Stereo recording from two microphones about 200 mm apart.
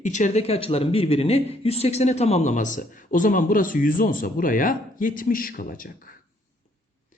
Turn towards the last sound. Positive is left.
turn(degrees=45)  # may be behind; listen again after turning